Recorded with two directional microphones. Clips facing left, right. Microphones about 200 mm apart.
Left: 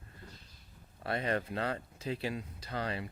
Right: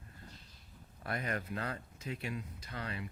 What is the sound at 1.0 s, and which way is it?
Speech, 30° left (ahead or behind).